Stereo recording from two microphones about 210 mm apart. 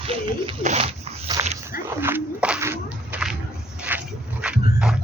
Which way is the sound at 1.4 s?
10° right (ahead or behind).